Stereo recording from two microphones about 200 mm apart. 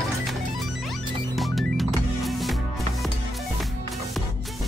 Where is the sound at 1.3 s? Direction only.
Centre (ahead or behind).